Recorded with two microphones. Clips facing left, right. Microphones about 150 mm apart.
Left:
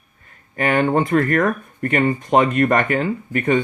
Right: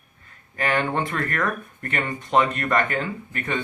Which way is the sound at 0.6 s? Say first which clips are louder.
Left 6 dB; 40° left (ahead or behind).